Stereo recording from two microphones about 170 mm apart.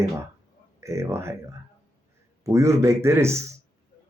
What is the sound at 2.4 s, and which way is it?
Speech, 15° right (ahead or behind).